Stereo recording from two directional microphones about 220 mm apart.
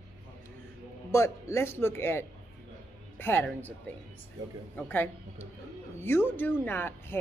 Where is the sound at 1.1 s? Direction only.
15° left (ahead or behind).